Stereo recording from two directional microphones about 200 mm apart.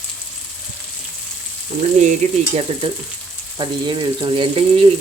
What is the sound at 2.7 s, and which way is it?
Speech, 30° right (ahead or behind).